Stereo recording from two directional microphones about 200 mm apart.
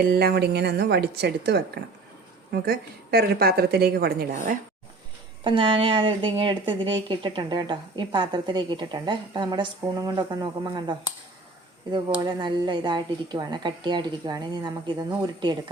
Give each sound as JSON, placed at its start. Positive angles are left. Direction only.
{"t": 0.0, "sound": "a woman's voice", "side_deg": -50}
{"t": 5.4, "sound": "speech", "side_deg": -25}
{"t": 12.2, "sound": "speech", "side_deg": -20}